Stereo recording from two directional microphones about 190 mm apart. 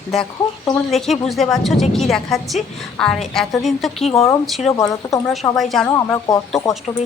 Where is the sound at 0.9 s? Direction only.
Centre (ahead or behind).